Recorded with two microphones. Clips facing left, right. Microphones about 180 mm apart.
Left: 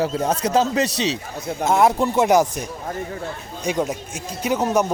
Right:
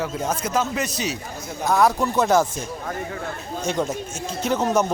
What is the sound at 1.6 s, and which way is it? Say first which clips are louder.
Speech: left 2 dB; 25° left (ahead or behind).